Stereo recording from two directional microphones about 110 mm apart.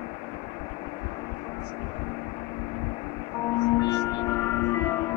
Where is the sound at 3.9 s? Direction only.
30° left (ahead or behind).